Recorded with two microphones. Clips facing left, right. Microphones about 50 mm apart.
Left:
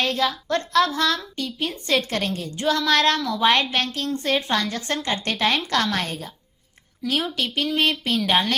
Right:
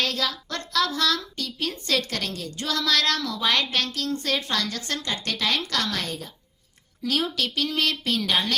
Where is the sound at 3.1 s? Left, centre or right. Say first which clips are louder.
Left 4 dB; centre.